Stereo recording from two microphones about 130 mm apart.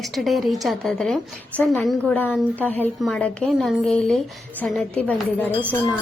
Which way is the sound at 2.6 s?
15° left (ahead or behind).